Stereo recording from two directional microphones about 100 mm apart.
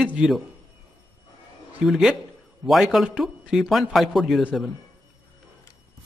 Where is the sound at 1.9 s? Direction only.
Centre (ahead or behind).